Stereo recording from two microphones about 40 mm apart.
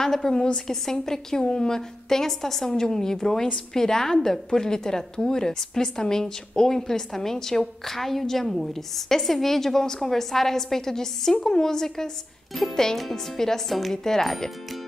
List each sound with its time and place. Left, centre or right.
0.0 s a woman's voice: centre
1.8 s a woman's voice: centre